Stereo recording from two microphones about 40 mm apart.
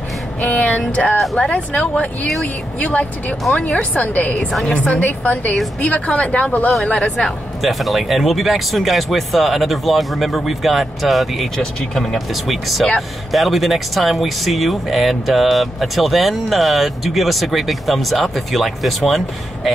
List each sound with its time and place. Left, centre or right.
0.4 s music: left
1.5 s speech: left
3.5 s speech: left
3.9 s speech: left
6.9 s speech: left
7.6 s speech: centre
12.4 s speech: centre